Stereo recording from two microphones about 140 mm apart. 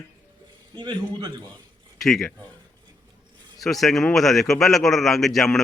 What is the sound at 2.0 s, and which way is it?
Speech, centre (ahead or behind).